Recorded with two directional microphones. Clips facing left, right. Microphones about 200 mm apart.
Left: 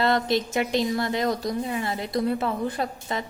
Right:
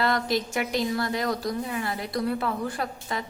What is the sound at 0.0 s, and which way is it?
A woman's voice, 25° left (ahead or behind).